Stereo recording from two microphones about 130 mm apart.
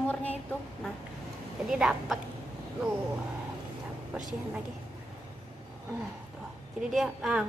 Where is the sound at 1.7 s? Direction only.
5° right (ahead or behind).